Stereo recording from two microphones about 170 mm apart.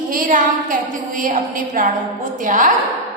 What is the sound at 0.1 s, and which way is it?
A woman's voice, 55° right (ahead or behind).